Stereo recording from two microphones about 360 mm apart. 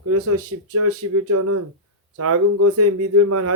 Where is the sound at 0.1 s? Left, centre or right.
Right.